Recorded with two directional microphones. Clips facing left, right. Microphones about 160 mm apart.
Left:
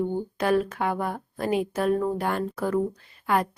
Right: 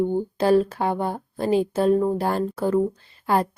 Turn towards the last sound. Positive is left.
turn(degrees=-30)  # may be behind; listen again after turning